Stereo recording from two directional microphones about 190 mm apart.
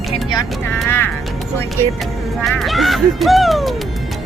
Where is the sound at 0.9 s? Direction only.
10° left (ahead or behind).